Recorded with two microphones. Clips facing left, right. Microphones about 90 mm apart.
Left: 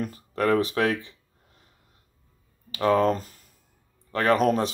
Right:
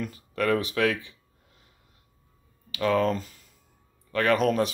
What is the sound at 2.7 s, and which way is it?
Speech, 35° left (ahead or behind).